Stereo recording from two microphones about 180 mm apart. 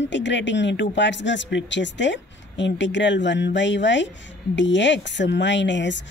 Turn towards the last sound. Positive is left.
turn(degrees=80)